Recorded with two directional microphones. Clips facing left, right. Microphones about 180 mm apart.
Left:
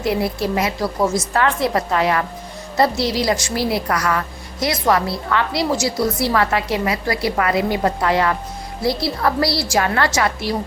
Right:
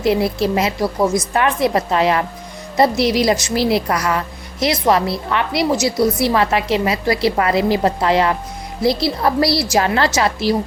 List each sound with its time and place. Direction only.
0.0 s a woman's voice: 25° right (ahead or behind)